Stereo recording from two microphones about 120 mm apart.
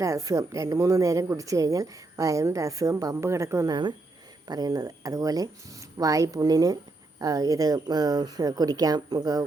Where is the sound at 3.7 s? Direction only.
40° right (ahead or behind).